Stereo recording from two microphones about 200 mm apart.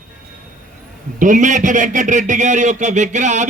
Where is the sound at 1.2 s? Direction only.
40° right (ahead or behind).